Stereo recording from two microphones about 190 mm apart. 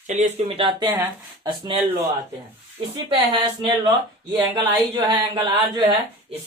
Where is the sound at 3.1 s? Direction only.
25° right (ahead or behind).